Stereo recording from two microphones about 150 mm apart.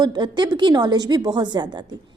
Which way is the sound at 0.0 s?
30° right (ahead or behind).